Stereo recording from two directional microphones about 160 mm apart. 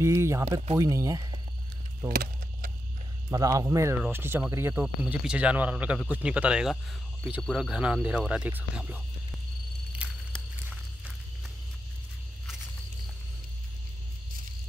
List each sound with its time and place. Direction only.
0.0 s speech: 15° right (ahead or behind)
2.0 s keys jangling: 65° right (ahead or behind)
3.3 s speech: 20° right (ahead or behind)
4.8 s speech: 5° right (ahead or behind)
10.0 s a sound: 10° right (ahead or behind)